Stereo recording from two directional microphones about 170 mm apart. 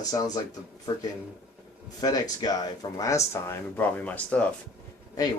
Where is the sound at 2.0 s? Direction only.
20° left (ahead or behind).